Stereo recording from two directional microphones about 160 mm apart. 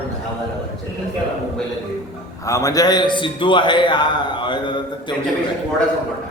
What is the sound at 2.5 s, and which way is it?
A man's voice, 20° left (ahead or behind).